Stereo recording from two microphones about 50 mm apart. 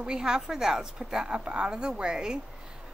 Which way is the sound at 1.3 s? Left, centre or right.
Right.